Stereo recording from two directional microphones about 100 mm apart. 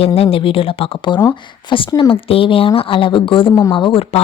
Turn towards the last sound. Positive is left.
turn(degrees=70)  # may be behind; listen again after turning